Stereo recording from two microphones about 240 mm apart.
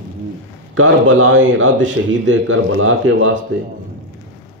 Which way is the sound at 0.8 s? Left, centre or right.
Right.